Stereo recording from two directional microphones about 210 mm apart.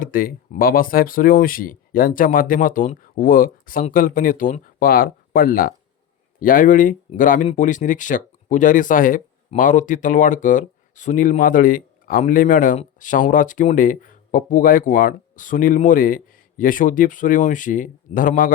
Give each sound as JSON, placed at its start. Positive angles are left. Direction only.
{"t": 0.0, "sound": "speech", "side_deg": 40}